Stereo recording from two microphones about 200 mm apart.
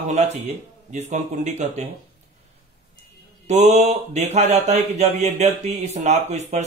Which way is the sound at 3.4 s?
35° right (ahead or behind).